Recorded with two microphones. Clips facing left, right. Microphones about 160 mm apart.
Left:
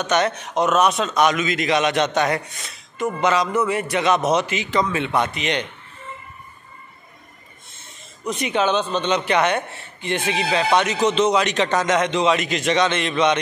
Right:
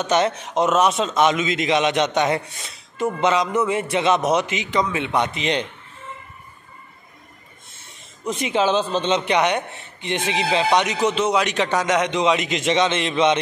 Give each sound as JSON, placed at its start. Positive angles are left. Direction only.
{"t": 0.0, "sound": "a man's voice", "side_deg": -30}
{"t": 4.2, "sound": "a man's voice", "side_deg": -10}
{"t": 8.2, "sound": "a man's voice", "side_deg": -25}